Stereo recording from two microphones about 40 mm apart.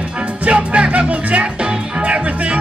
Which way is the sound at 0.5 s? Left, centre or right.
Right.